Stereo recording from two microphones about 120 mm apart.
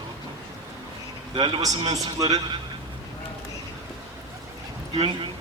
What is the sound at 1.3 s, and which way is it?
A man's voice, 35° right (ahead or behind).